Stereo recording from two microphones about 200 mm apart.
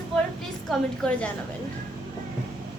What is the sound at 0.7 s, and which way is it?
Speech, 5° left (ahead or behind).